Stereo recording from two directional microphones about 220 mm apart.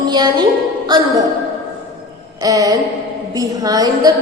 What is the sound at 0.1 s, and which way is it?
Speech, 20° right (ahead or behind).